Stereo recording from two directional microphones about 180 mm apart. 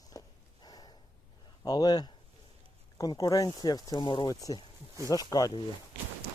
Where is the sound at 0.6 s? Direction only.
25° left (ahead or behind).